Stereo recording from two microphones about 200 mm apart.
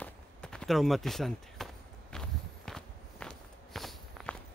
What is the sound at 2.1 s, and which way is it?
Walk, centre (ahead or behind).